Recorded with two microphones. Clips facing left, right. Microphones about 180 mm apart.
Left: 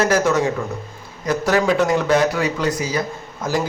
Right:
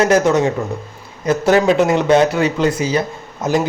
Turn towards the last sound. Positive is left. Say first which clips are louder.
# right 5 dB
turn(degrees=-20)  # may be behind; listen again after turning